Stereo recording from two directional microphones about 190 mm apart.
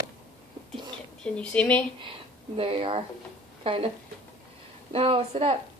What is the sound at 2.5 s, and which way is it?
A woman's voice, 30° right (ahead or behind).